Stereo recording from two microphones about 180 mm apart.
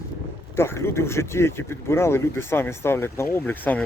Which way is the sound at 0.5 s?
15° left (ahead or behind).